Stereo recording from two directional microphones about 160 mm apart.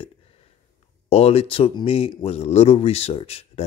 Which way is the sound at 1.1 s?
40° left (ahead or behind).